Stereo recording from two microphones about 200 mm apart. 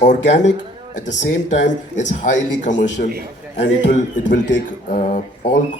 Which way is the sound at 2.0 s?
40° left (ahead or behind).